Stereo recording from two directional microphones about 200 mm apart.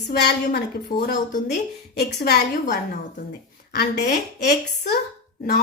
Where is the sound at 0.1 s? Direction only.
50° left (ahead or behind).